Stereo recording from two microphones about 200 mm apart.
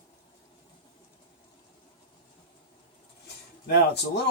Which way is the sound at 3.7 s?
55° left (ahead or behind).